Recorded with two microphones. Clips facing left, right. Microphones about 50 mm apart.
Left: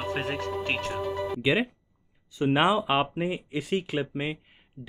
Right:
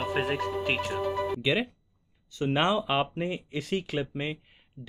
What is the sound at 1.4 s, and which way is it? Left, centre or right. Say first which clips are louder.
Speech: left 2 dB; centre.